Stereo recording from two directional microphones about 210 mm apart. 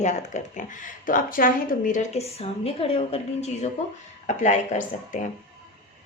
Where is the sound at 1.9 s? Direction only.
30° left (ahead or behind).